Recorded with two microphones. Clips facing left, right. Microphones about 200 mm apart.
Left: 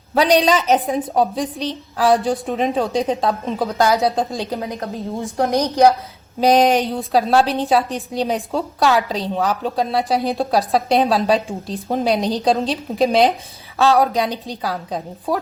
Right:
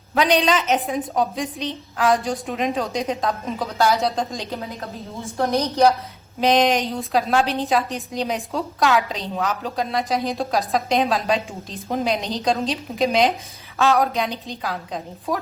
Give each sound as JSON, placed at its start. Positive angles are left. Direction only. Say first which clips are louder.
{"t": 0.1, "sound": "a woman's voice", "louder": "left 4 dB", "side_deg": 35}
{"t": 5.2, "sound": "a woman's voice", "louder": "left 2 dB", "side_deg": 15}
{"t": 6.4, "sound": "a woman's voice", "louder": "left 4 dB", "side_deg": 40}